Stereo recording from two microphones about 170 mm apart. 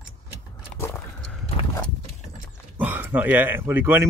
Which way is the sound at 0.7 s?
10° left (ahead or behind).